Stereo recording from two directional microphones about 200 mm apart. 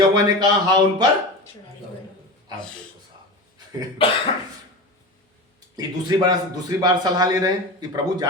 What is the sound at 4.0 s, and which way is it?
Cough, 30° left (ahead or behind).